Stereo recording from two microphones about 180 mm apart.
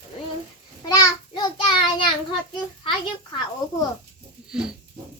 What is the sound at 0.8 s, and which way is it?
Child singing, 20° left (ahead or behind).